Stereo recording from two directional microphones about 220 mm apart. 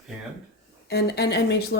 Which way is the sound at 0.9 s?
45° left (ahead or behind).